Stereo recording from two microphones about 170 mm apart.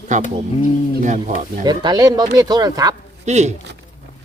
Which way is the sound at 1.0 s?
45° right (ahead or behind).